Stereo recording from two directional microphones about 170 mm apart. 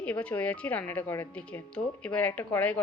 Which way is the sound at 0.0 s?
10° left (ahead or behind).